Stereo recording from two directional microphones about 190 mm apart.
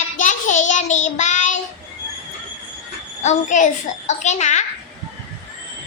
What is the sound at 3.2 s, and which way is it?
A child's voice, 40° left (ahead or behind).